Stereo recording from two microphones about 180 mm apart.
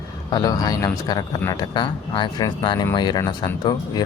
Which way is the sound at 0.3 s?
20° left (ahead or behind).